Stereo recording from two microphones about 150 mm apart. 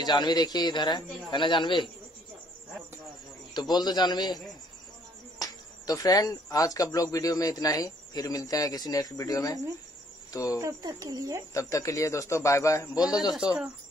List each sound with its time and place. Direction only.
0.0 s a man's voice: 30° left (ahead or behind)
3.5 s speech: 30° left (ahead or behind)
5.4 s speech: 25° left (ahead or behind)
10.6 s speech: 25° right (ahead or behind)
11.5 s speech: 20° left (ahead or behind)